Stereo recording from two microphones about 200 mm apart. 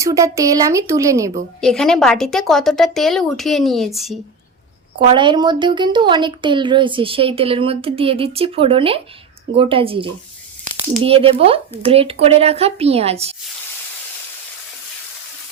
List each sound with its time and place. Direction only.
0.0 s speech: 15° right (ahead or behind)
1.6 s a woman's voice: centre (ahead or behind)
4.9 s a woman's voice: 25° right (ahead or behind)